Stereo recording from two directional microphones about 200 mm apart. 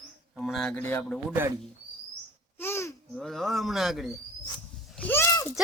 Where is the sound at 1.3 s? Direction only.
10° right (ahead or behind).